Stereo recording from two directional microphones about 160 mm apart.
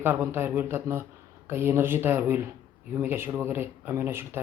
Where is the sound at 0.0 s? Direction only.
15° right (ahead or behind).